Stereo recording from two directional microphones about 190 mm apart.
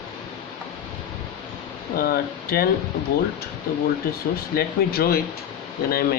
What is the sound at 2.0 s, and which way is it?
Speech, 55° left (ahead or behind).